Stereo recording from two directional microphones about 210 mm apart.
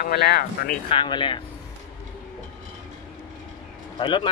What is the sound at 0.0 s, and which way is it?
Speech, 50° left (ahead or behind).